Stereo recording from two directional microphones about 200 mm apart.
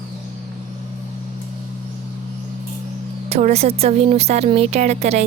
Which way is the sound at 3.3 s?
35° right (ahead or behind).